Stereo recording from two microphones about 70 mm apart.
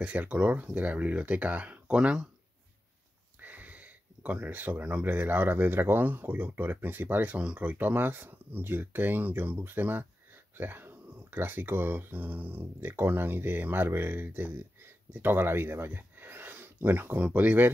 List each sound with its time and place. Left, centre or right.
0.0 s speech: right
3.3 s speech: right